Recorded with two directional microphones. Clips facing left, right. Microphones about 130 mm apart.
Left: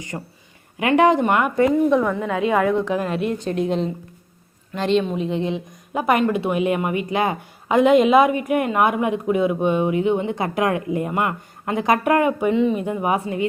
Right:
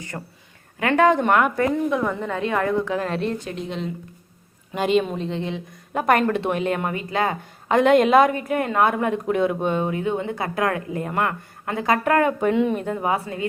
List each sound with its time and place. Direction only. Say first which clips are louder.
0.1 s speech: left 3 dB; 15° left (ahead or behind)
1.2 s a woman's voice: even; 5° left (ahead or behind)
1.5 s a woman's voice: left 5 dB; 20° left (ahead or behind)
2.0 s a woman's voice: left 3 dB; centre (ahead or behind)
2.4 s speech: left 3 dB; 10° left (ahead or behind)
3.7 s speech: left 7 dB; 35° left (ahead or behind)
4.7 s speech: even; 5° right (ahead or behind)
5.1 s speech: left 4 dB; 10° left (ahead or behind)
5.9 s speech: even; 5° left (ahead or behind)
7.7 s speech: left 1 dB; 5° left (ahead or behind)
12.5 s a woman's voice: left 2 dB; centre (ahead or behind)
12.8 s speech: left 2 dB; 15° left (ahead or behind)